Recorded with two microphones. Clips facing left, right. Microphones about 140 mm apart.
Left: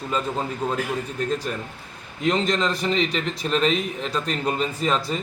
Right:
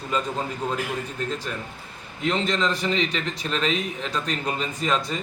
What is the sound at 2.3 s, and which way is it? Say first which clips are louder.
A man's voice: left 2 dB; 40° left (ahead or behind).